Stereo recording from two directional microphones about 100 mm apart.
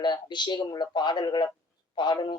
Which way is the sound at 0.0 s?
50° left (ahead or behind).